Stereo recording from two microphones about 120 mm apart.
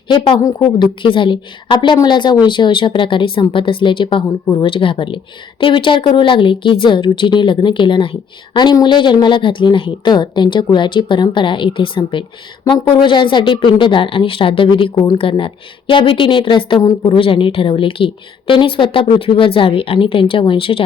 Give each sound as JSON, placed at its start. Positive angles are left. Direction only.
{"t": 0.1, "sound": "speech", "side_deg": 45}